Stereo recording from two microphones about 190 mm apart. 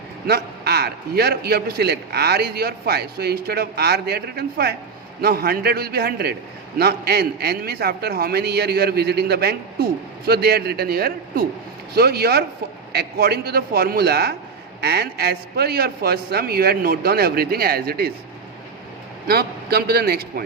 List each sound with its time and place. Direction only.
0.3 s a man's voice: 55° right (ahead or behind)
19.3 s a man's voice: 55° right (ahead or behind)